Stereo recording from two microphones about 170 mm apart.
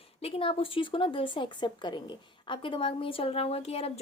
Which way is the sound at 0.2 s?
35° left (ahead or behind).